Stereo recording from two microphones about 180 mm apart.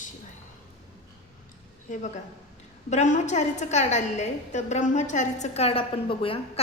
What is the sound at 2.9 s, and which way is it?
A woman's voice, 40° left (ahead or behind).